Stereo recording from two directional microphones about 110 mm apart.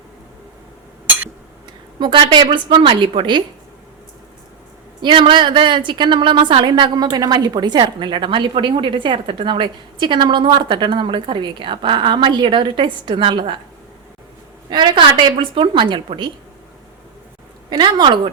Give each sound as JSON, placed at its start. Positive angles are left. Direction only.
{"t": 2.0, "sound": "a woman's voice", "side_deg": -45}
{"t": 4.9, "sound": "a woman's voice", "side_deg": -50}
{"t": 14.7, "sound": "a woman's voice", "side_deg": -45}
{"t": 17.7, "sound": "a woman's voice", "side_deg": -40}